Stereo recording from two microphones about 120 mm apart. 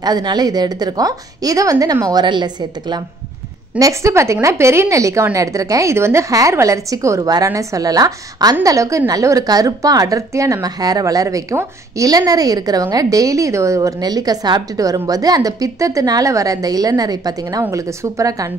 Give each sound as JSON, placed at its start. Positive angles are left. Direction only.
{"t": 0.0, "sound": "a woman's voice", "side_deg": -35}
{"t": 3.8, "sound": "a woman's voice", "side_deg": -25}